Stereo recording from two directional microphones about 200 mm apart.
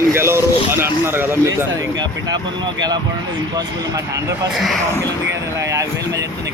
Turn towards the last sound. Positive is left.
turn(degrees=-15)  # may be behind; listen again after turning